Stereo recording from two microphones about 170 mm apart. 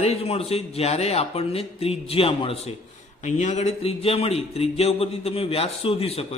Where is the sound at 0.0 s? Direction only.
35° left (ahead or behind).